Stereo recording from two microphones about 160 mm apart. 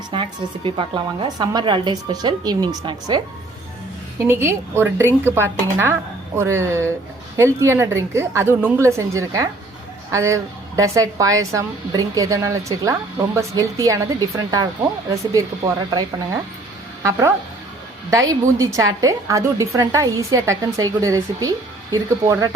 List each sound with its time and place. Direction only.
0.1 s a woman's voice: 30° right (ahead or behind)
4.2 s a woman's voice: 15° right (ahead or behind)